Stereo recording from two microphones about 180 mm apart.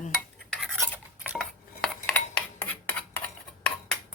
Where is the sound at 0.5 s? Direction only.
Centre (ahead or behind).